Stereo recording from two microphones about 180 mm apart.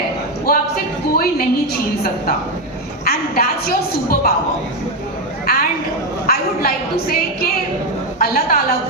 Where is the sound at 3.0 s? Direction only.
55° left (ahead or behind).